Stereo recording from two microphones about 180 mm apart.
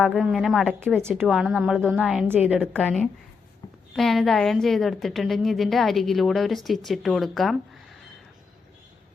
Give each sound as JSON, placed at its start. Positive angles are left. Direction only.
{"t": 0.0, "sound": "a woman's voice", "side_deg": -5}
{"t": 2.7, "sound": "a woman's voice", "side_deg": 5}